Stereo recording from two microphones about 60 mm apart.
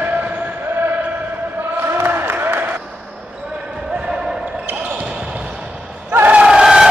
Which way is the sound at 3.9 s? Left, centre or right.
Centre.